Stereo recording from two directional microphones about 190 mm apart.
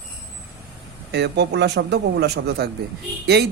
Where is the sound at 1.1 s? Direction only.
65° right (ahead or behind).